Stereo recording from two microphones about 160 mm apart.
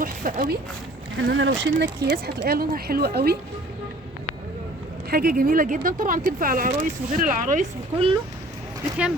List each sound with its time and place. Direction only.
0.0 s speech: 60° right (ahead or behind)
1.3 s speech: 90° right
5.1 s speech: 65° right (ahead or behind)
7.9 s speech: 35° right (ahead or behind)